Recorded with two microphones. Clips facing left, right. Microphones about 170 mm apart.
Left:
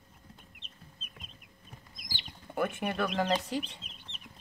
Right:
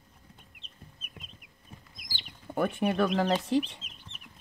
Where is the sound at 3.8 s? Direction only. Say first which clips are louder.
Left 1 dB; 20° right (ahead or behind).